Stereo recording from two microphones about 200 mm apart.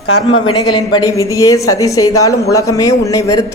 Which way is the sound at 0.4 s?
25° left (ahead or behind).